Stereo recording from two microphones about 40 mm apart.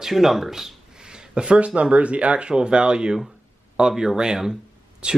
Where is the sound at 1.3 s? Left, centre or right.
Right.